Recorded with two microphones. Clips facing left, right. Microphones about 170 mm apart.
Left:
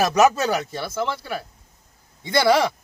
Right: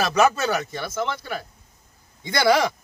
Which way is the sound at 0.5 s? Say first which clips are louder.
Left 1 dB; 5° left (ahead or behind).